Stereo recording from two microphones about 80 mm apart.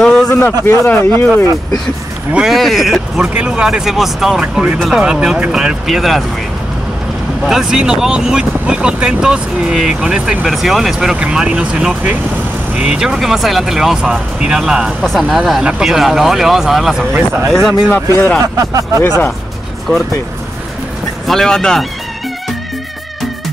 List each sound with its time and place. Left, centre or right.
0.0 s a sound: centre
0.7 s speech: left
2.5 s speech: centre
3.3 s speech: centre
7.4 s speech: centre
15.0 s speech: centre
17.9 s speech: left
18.4 s speech: right
21.3 s speech: centre